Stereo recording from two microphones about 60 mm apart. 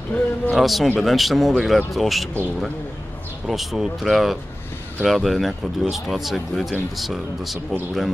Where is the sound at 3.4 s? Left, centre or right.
Centre.